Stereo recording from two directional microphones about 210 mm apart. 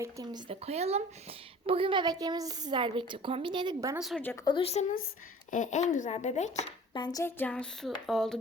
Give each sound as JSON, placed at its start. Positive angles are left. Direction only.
{"t": 0.0, "sound": "speech", "side_deg": -20}
{"t": 3.9, "sound": "speech", "side_deg": 0}
{"t": 4.4, "sound": "speech", "side_deg": 25}
{"t": 6.9, "sound": "speech", "side_deg": 20}